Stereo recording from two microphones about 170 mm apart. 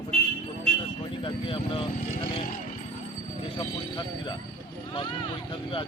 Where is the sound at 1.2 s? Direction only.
30° left (ahead or behind).